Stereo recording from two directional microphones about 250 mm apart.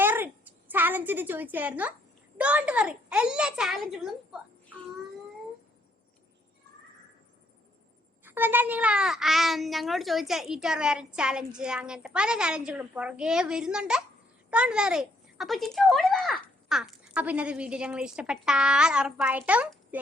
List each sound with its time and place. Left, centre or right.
0.0 s a sound: centre
2.4 s a child's voice: centre
8.2 s a child's voice: centre